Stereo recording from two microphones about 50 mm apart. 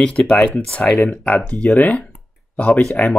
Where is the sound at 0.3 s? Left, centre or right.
Left.